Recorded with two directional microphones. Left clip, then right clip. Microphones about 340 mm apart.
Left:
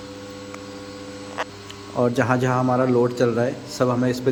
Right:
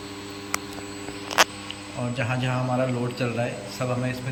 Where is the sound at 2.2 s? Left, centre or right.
Centre.